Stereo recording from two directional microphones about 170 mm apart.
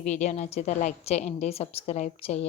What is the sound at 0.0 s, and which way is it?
A woman's voice, 40° left (ahead or behind).